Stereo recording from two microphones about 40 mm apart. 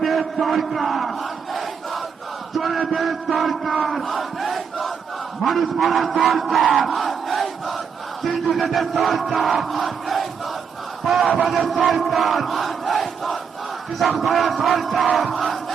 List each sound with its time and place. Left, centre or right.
0.0 s a sound: centre
0.4 s crowd: centre
5.4 s a man's voice: centre
6.2 s battle cry: centre
8.2 s crowd: centre
11.0 s battle cry: centre
11.4 s speech: centre
11.7 s crowd: centre